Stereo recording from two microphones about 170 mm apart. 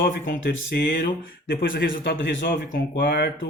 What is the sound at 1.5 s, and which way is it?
Speech, 65° left (ahead or behind).